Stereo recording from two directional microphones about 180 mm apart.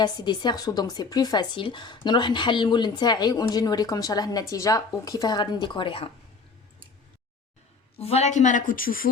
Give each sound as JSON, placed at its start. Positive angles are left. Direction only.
{"t": 0.0, "sound": "speech", "side_deg": 25}
{"t": 7.9, "sound": "a woman's voice", "side_deg": 35}